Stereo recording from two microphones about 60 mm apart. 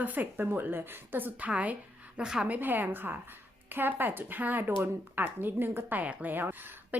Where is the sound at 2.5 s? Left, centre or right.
Right.